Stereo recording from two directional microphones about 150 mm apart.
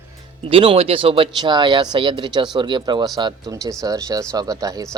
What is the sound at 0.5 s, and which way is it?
Speech, 35° right (ahead or behind).